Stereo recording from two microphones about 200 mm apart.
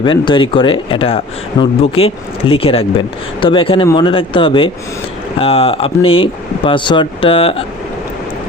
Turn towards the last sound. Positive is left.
turn(degrees=30)  # may be behind; listen again after turning